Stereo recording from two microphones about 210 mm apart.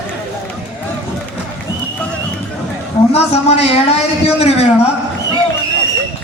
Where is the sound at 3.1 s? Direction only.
30° left (ahead or behind).